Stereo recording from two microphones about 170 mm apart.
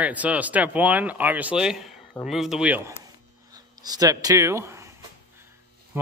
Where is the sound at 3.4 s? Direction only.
20° right (ahead or behind).